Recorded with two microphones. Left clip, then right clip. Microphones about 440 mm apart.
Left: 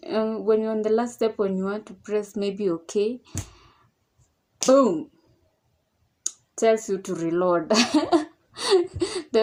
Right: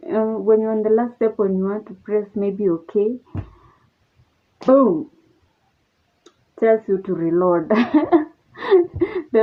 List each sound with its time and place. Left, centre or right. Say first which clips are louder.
0.0 s speech: right 5 dB; right
4.5 s speech: right 3 dB; right
6.2 s speech: right 4 dB; right